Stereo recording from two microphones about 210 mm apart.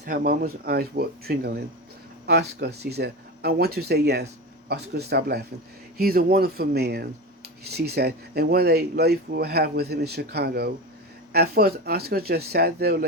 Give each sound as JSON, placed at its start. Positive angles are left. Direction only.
{"t": 0.0, "sound": "speech", "side_deg": -45}